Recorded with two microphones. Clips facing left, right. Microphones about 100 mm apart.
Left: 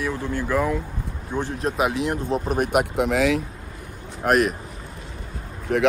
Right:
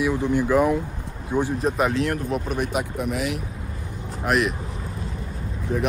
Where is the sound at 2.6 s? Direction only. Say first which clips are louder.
Left 5 dB; 65° left (ahead or behind); by 3.2 s 90° left.